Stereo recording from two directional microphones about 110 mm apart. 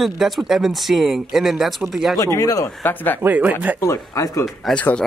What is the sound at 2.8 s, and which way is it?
Speech, 15° left (ahead or behind).